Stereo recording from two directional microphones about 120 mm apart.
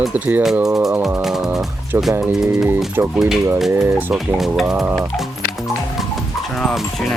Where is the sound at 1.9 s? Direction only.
15° right (ahead or behind).